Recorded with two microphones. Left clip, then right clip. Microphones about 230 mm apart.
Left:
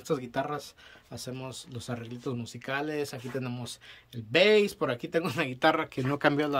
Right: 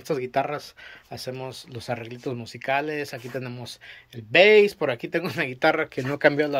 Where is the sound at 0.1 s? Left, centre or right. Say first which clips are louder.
Right 6 dB; centre.